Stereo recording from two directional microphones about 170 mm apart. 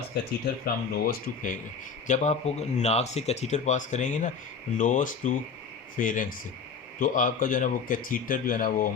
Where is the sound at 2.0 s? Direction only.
45° left (ahead or behind).